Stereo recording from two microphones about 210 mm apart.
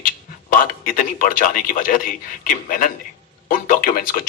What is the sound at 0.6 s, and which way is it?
A man's voice, 40° left (ahead or behind).